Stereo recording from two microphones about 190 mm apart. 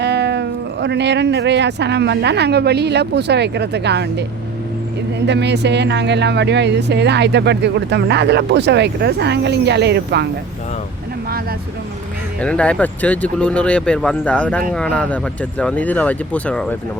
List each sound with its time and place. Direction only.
0.0 s speech: 60° right (ahead or behind)
12.4 s speech: 5° left (ahead or behind)